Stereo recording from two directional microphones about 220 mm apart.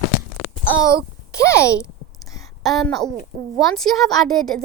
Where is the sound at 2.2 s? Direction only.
15° left (ahead or behind).